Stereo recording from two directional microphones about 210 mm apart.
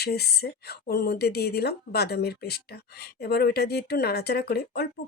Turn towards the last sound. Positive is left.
turn(degrees=50)  # may be behind; listen again after turning